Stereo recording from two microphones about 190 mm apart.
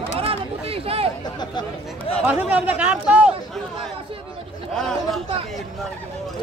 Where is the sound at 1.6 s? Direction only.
30° left (ahead or behind).